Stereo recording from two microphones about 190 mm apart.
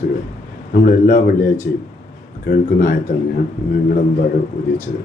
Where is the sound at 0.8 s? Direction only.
55° left (ahead or behind).